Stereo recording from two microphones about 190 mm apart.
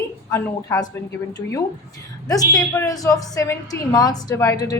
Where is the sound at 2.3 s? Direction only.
20° left (ahead or behind).